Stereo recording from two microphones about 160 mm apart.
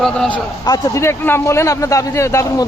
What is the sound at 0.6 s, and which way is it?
A man's voice, 20° left (ahead or behind).